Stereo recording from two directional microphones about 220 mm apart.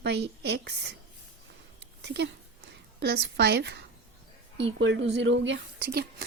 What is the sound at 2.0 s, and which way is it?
A woman's voice, 50° right (ahead or behind).